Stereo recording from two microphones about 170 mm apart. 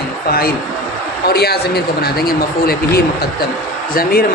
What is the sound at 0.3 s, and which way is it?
Speech, 60° left (ahead or behind).